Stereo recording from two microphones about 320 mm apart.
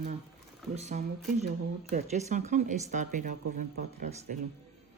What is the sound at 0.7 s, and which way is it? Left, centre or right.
Speech, right.